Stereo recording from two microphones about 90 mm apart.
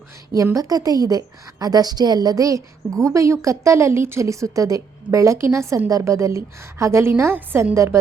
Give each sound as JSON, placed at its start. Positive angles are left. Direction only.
{"t": 0.5, "sound": "a woman's voice", "side_deg": -40}